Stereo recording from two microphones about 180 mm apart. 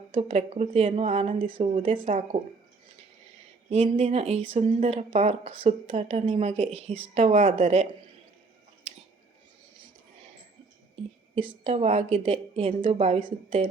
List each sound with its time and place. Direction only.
0.1 s speech: 35° right (ahead or behind)
1.5 s speech: 30° right (ahead or behind)
1.7 s a woman's voice: 45° right (ahead or behind)
2.3 s speech: 30° right (ahead or behind)
3.7 s speech: 35° right (ahead or behind)
11.6 s speech: 35° right (ahead or behind)